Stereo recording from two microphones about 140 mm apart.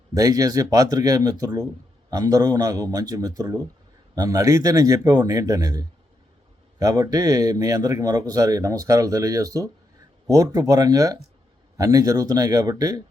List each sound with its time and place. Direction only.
0.1 s speech: 25° right (ahead or behind)